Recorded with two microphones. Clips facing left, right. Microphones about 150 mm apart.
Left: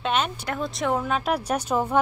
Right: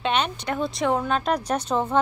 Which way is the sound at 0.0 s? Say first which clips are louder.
Right 1 dB; centre (ahead or behind).